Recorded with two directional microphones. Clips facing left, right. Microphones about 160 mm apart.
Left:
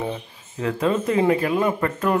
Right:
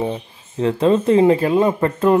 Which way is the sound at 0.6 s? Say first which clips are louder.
Right 6 dB; 30° right (ahead or behind).